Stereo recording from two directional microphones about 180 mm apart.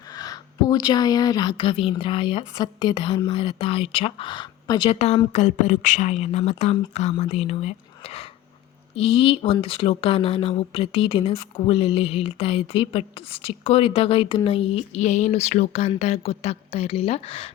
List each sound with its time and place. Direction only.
0.2 s a woman's voice: 20° left (ahead or behind)